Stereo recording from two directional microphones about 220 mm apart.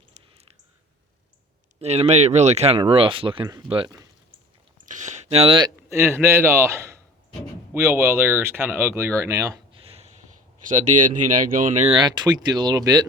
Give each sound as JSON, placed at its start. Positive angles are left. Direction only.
{"t": 1.8, "sound": "speech", "side_deg": -30}
{"t": 9.8, "sound": "a sound", "side_deg": -25}
{"t": 10.7, "sound": "speech", "side_deg": -35}
{"t": 11.9, "sound": "speech", "side_deg": -20}